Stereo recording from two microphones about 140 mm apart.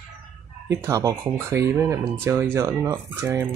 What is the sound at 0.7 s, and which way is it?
Speech, 20° right (ahead or behind).